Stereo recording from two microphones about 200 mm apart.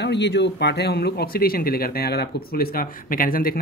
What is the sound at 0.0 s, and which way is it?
Speech, 60° left (ahead or behind).